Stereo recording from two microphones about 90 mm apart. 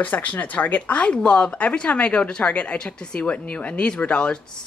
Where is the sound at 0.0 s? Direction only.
20° left (ahead or behind).